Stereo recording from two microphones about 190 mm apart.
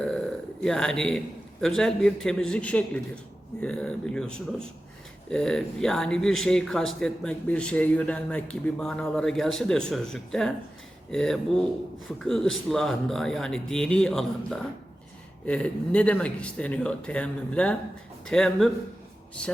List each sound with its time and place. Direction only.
0.6 s speech: 5° left (ahead or behind)